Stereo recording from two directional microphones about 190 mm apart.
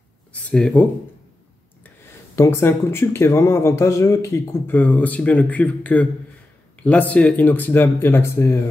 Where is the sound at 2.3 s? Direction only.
15° left (ahead or behind).